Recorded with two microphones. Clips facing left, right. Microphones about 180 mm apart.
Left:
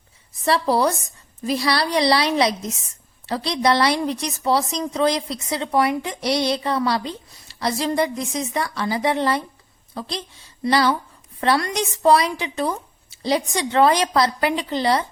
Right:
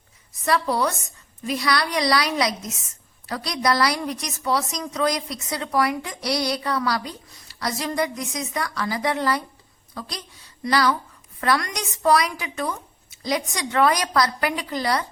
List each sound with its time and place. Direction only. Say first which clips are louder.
0.4 s a woman's voice: left 3 dB; 30° left (ahead or behind)